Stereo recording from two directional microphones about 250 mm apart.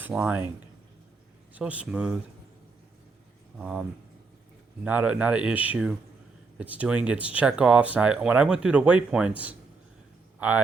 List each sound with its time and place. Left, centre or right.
0.0 s speech: centre
1.5 s speech: centre
3.6 s speech: centre